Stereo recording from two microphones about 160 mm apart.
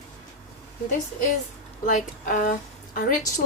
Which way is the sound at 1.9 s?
55° left (ahead or behind).